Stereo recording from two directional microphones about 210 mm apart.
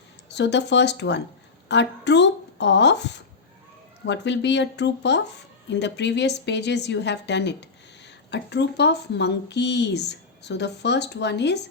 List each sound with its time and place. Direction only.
0.3 s speech: 55° left (ahead or behind)